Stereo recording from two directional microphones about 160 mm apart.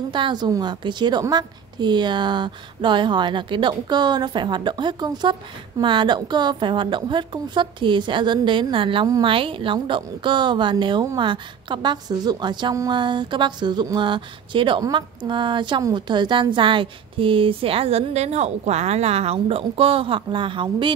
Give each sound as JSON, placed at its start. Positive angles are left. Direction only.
{"t": 0.1, "sound": "a woman's voice", "side_deg": -30}